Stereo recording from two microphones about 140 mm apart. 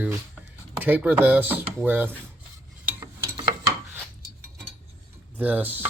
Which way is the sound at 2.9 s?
20° right (ahead or behind).